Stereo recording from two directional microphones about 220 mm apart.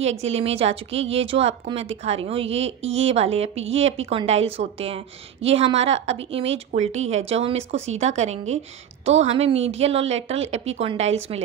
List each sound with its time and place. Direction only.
0.0 s a woman's voice: 30° right (ahead or behind)